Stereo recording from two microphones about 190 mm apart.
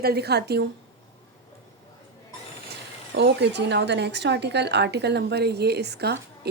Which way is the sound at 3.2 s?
60° right (ahead or behind).